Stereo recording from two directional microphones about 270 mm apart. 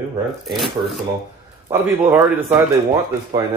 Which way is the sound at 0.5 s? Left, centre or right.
Centre.